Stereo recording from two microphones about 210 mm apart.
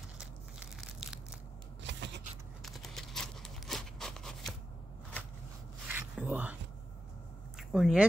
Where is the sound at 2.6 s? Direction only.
Centre (ahead or behind).